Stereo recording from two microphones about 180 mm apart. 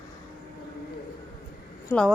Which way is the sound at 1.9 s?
15° left (ahead or behind).